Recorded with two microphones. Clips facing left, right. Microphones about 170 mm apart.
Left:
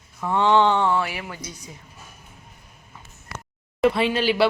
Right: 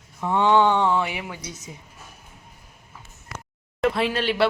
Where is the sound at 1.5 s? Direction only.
20° right (ahead or behind).